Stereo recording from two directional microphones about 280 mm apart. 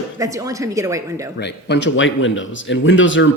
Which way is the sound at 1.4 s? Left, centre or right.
Left.